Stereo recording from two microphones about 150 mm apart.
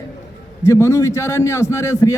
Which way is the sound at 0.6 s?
20° left (ahead or behind).